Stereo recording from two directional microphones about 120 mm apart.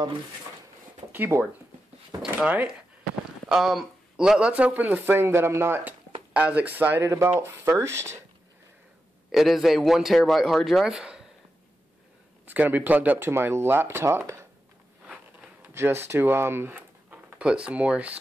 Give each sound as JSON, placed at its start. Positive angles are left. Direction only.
{"t": 1.1, "sound": "speech", "side_deg": -15}
{"t": 3.4, "sound": "speech", "side_deg": 0}
{"t": 9.3, "sound": "a man's voice", "side_deg": 0}
{"t": 12.4, "sound": "speech", "side_deg": -15}
{"t": 15.6, "sound": "speech", "side_deg": -20}